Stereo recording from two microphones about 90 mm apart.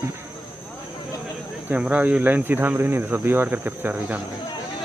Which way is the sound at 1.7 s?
15° right (ahead or behind).